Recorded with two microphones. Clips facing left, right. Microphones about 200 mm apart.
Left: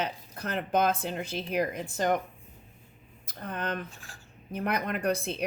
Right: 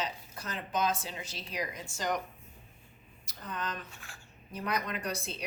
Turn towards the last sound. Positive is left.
turn(degrees=55)  # may be behind; listen again after turning